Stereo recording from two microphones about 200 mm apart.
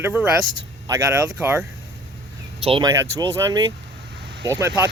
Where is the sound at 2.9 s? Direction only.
15° right (ahead or behind).